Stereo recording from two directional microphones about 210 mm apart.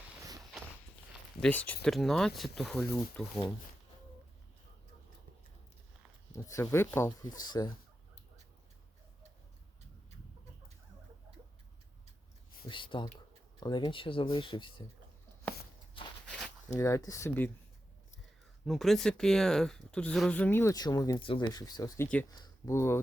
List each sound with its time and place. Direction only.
1.4 s speech: 5° left (ahead or behind)
6.3 s speech: 15° left (ahead or behind)
12.6 s speech: 25° left (ahead or behind)
16.2 s walk: 5° left (ahead or behind)
16.7 s speech: 15° left (ahead or behind)
18.6 s speech: centre (ahead or behind)